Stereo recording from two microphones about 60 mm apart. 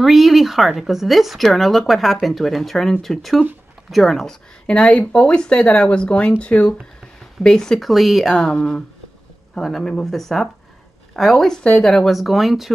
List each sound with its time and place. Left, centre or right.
0.0 s speech: centre
4.6 s speech: centre
12.2 s speech: centre